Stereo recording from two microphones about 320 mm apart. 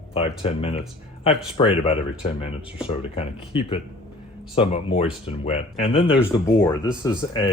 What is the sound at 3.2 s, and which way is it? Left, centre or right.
Speech, centre.